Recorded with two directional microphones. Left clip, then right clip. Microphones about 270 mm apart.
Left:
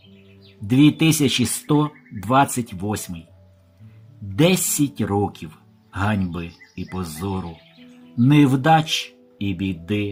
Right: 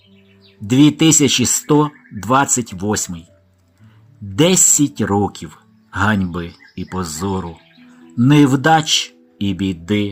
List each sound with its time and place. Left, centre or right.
0.7 s speech: centre
4.4 s speech: centre